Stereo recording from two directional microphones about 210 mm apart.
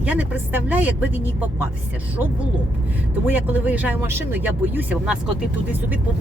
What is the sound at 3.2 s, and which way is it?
Speech, 10° right (ahead or behind).